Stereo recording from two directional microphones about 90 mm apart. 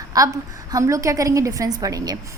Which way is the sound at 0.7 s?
40° right (ahead or behind).